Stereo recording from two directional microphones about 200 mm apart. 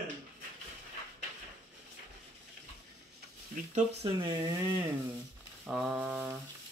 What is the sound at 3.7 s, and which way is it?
Speech, 30° right (ahead or behind).